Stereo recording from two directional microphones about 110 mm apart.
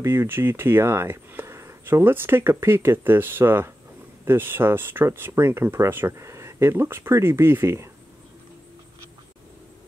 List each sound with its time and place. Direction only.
0.0 s speech: 25° right (ahead or behind)